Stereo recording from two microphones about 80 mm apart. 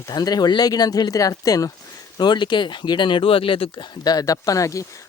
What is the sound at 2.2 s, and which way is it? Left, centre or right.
Speech, left.